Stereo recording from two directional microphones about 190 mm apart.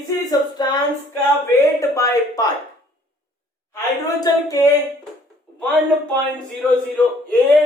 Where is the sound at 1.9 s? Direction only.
15° left (ahead or behind).